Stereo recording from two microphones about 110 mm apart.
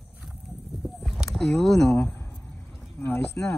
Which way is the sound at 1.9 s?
20° left (ahead or behind).